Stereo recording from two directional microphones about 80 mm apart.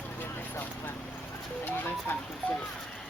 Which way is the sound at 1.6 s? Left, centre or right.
Left.